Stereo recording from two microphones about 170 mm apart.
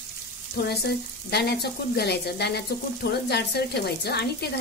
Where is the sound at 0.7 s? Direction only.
70° left (ahead or behind).